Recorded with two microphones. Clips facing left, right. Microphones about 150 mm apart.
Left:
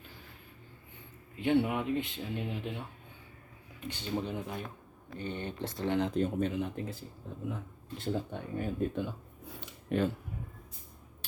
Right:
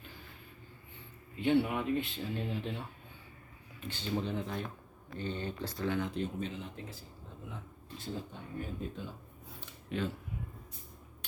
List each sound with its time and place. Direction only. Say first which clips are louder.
1.4 s speech: left 1 dB; 15° left (ahead or behind)
3.8 s speech: even; 15° left (ahead or behind)
6.1 s speech: left 6 dB; 50° left (ahead or behind)
7.9 s speech: left 7 dB; 65° left (ahead or behind)
9.9 s speech: left 6 dB; 55° left (ahead or behind)